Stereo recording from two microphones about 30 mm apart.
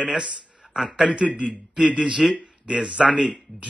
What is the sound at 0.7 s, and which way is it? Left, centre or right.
Speech, centre.